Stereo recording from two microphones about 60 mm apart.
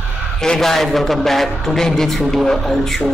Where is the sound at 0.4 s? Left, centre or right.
Centre.